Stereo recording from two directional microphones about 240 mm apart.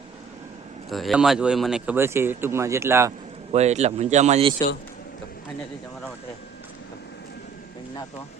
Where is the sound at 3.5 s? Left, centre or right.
Right.